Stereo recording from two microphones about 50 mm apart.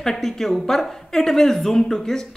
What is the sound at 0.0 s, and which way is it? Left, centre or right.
A woman's voice, centre.